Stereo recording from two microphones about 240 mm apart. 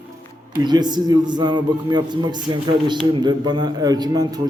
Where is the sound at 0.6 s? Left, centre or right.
Centre.